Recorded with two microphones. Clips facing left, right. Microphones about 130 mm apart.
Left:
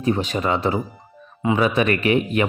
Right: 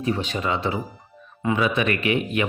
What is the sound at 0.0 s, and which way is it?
Speech, 40° left (ahead or behind).